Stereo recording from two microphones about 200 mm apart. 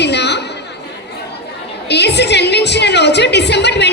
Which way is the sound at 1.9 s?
60° left (ahead or behind).